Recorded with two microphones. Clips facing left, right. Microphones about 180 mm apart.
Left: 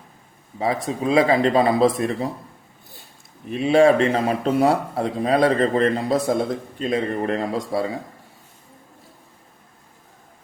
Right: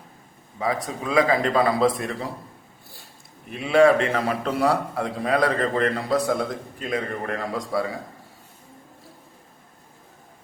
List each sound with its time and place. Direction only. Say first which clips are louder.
0.6 s a man's voice: left 4 dB; 25° left (ahead or behind)
3.5 s a man's voice: left 2 dB; 25° left (ahead or behind)